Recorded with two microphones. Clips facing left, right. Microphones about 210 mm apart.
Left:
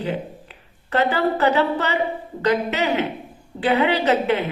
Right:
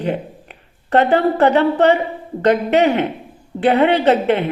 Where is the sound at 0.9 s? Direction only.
60° right (ahead or behind).